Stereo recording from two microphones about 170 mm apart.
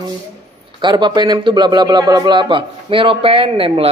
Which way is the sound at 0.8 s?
25° right (ahead or behind).